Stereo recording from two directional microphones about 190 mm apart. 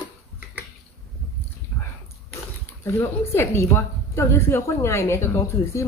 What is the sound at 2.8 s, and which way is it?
A woman's voice, 15° left (ahead or behind).